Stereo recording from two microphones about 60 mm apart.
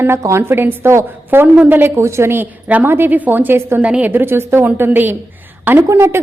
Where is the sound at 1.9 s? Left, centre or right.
Right.